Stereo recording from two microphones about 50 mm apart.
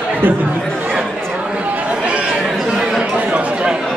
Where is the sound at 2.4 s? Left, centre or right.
Centre.